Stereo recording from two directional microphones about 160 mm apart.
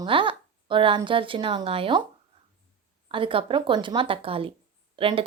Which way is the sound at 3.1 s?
35° right (ahead or behind).